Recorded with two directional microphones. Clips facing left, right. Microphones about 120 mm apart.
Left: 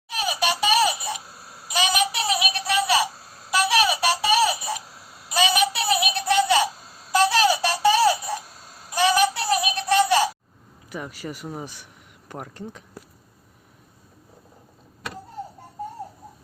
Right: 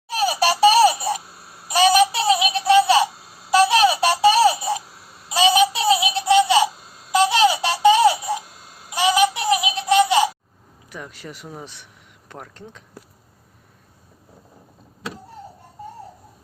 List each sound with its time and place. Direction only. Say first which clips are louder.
0.1 s baby laughter: right 5 dB; 35° right (ahead or behind)
1.3 s a sound: even; centre (ahead or behind)
1.7 s synthetic singing: right 8 dB; 40° right (ahead or behind)
3.5 s baby laughter: right 6 dB; 30° right (ahead or behind)
4.9 s a sound: even; centre (ahead or behind)
5.4 s synthetic singing: right 5 dB; 25° right (ahead or behind)
7.1 s baby laughter: right 2 dB; 20° right (ahead or behind)
8.9 s a sound: right 2 dB; 20° right (ahead or behind)
10.8 s speech: left 3 dB; 5° left (ahead or behind)